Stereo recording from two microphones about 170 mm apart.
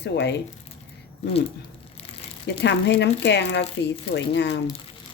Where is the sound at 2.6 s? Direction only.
90° left.